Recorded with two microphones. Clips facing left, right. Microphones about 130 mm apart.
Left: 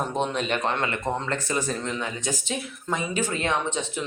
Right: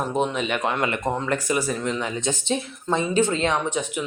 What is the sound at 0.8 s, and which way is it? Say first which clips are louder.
Speech: right 3 dB; 20° right (ahead or behind).